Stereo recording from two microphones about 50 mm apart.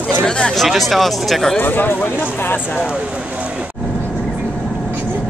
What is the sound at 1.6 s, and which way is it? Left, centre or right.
Speech, left.